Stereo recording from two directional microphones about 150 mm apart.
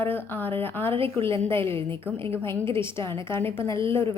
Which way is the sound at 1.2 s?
15° left (ahead or behind).